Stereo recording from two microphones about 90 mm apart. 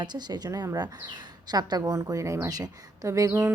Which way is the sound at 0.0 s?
50° right (ahead or behind).